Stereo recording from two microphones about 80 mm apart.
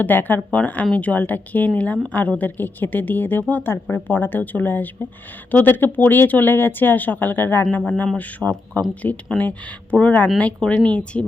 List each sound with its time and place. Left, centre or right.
0.0 s a man's voice: left